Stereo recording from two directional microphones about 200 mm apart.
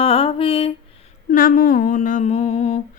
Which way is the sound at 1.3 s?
45° left (ahead or behind).